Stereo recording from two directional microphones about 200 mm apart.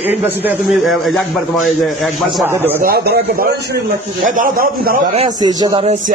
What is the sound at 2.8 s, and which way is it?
A man's voice, 50° right (ahead or behind).